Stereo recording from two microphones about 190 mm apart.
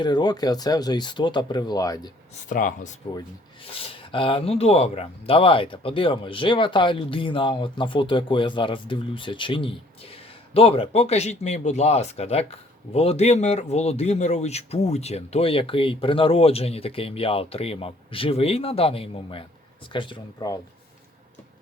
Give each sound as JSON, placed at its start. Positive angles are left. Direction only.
{"t": 0.0, "sound": "speech", "side_deg": 20}
{"t": 2.3, "sound": "speech", "side_deg": 40}
{"t": 3.6, "sound": "speech", "side_deg": 30}